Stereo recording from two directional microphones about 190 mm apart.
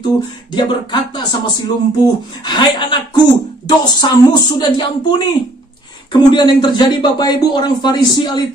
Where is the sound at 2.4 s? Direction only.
25° left (ahead or behind).